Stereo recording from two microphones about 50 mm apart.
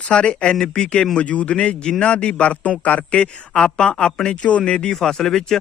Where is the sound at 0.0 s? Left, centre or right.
Left.